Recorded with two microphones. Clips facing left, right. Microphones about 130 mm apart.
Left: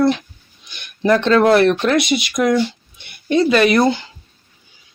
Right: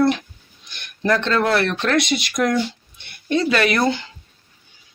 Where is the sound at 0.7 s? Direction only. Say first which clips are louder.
Left 4 dB; 5° left (ahead or behind).